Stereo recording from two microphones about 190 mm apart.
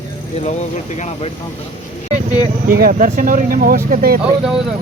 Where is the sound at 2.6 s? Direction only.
50° right (ahead or behind).